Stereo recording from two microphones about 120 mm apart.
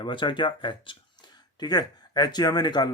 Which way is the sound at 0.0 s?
40° left (ahead or behind).